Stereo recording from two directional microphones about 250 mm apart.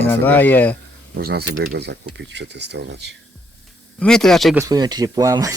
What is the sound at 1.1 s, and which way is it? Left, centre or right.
Speech, right.